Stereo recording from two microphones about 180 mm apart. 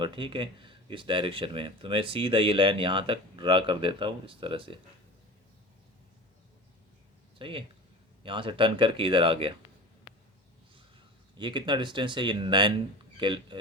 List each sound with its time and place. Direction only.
0.0 s speech: 25° right (ahead or behind)
7.3 s speech: 30° right (ahead or behind)
11.3 s speech: 25° right (ahead or behind)